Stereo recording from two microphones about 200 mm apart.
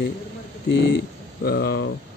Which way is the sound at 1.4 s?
50° left (ahead or behind).